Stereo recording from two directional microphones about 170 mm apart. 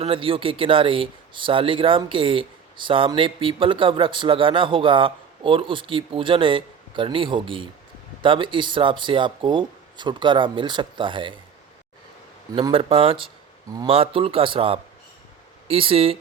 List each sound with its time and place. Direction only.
0.0 s speech: 30° right (ahead or behind)
12.5 s speech: 30° right (ahead or behind)